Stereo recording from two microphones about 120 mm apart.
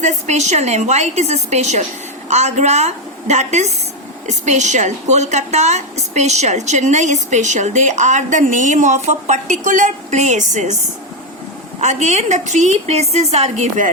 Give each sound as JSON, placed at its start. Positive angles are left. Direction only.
{"t": 0.0, "sound": "a woman's voice", "side_deg": -70}
{"t": 11.8, "sound": "a woman's voice", "side_deg": -75}